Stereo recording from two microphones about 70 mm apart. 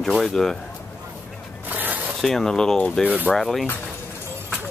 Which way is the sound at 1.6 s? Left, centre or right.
Right.